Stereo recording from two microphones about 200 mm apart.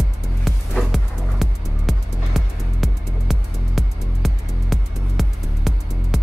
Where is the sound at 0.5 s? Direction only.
Centre (ahead or behind).